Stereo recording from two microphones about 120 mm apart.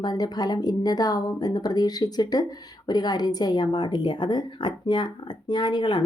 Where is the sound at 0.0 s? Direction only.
35° left (ahead or behind).